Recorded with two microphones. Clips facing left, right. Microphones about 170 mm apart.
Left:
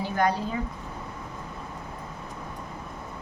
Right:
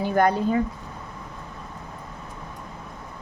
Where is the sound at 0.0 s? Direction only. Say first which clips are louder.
Right 5 dB; 55° right (ahead or behind).